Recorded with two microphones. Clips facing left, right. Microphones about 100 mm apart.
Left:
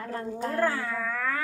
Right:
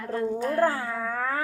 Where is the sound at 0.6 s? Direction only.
35° right (ahead or behind).